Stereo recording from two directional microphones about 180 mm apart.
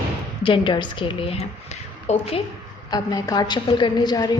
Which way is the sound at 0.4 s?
30° left (ahead or behind).